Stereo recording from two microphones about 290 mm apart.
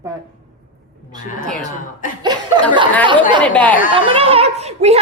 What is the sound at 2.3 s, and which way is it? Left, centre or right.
Chuckle, centre.